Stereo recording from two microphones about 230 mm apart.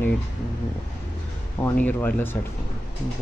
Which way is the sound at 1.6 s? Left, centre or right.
Centre.